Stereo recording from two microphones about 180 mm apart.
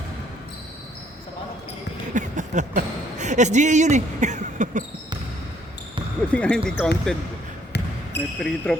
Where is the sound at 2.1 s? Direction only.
45° right (ahead or behind).